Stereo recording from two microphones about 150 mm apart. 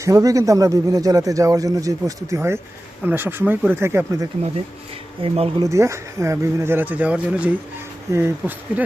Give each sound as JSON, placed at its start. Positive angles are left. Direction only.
{"t": 0.0, "sound": "a man's voice", "side_deg": -20}
{"t": 5.2, "sound": "speech", "side_deg": -40}
{"t": 5.6, "sound": "speech", "side_deg": -20}